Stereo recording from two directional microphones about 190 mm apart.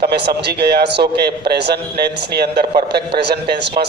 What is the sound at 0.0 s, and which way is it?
A man's voice, 55° right (ahead or behind).